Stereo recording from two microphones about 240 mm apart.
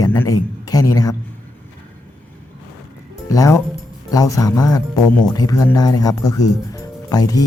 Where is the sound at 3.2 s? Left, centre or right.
Centre.